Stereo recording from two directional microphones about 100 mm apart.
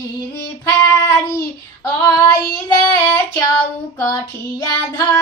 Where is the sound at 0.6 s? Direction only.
30° left (ahead or behind).